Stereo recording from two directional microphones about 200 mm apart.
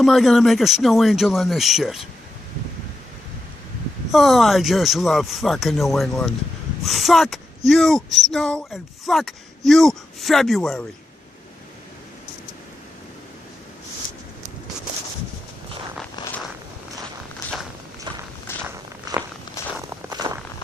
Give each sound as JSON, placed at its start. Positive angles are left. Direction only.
{"t": 0.0, "sound": "speech", "side_deg": 0}
{"t": 4.1, "sound": "speech", "side_deg": 0}
{"t": 18.5, "sound": "walk", "side_deg": 10}
{"t": 20.1, "sound": "walk", "side_deg": -20}